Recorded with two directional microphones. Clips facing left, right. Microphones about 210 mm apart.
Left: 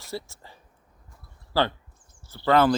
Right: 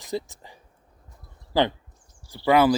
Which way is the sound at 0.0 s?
15° right (ahead or behind).